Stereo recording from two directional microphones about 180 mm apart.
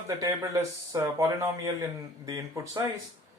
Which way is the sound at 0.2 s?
20° right (ahead or behind).